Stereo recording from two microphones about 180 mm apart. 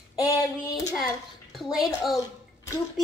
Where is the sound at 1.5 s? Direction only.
Centre (ahead or behind).